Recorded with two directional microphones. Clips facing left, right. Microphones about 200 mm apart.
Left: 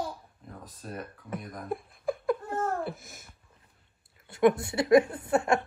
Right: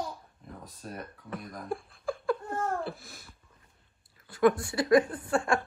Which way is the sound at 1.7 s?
20° left (ahead or behind).